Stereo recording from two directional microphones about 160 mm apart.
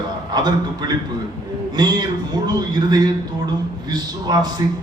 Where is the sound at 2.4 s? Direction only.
25° right (ahead or behind).